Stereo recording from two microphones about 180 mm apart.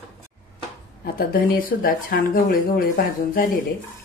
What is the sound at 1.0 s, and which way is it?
Speech, 55° left (ahead or behind).